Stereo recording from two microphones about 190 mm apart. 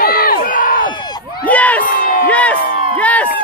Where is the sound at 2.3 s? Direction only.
5° left (ahead or behind).